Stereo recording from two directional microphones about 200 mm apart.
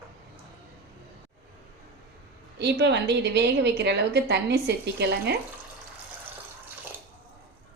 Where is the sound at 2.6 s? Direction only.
55° right (ahead or behind).